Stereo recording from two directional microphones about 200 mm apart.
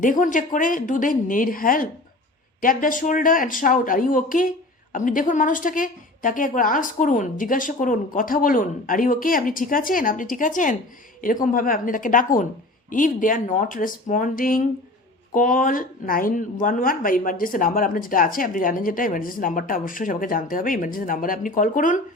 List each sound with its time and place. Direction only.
0.0 s a woman's voice: 40° left (ahead or behind)